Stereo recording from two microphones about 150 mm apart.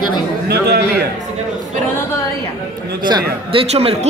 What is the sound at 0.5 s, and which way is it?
Speech, 90° right.